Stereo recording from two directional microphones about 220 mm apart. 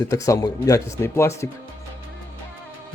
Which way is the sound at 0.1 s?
15° left (ahead or behind).